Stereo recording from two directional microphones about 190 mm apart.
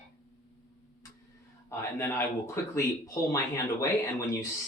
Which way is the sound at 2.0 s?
10° left (ahead or behind).